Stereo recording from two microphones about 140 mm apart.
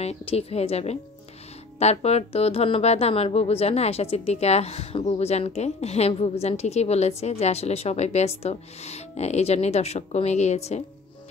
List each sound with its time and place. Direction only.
0.0 s speech: 45° left (ahead or behind)